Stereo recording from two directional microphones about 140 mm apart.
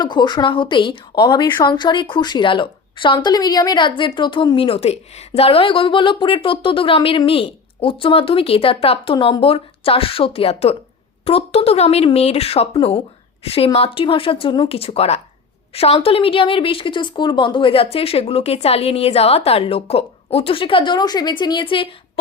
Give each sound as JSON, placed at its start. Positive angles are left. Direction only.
{"t": 0.0, "sound": "a woman's voice", "side_deg": 30}